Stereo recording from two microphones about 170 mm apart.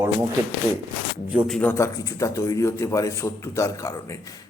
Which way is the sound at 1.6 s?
15° left (ahead or behind).